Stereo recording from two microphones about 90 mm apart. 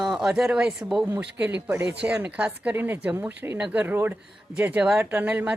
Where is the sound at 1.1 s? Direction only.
20° right (ahead or behind).